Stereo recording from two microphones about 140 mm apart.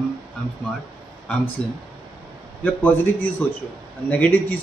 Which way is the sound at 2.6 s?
10° left (ahead or behind).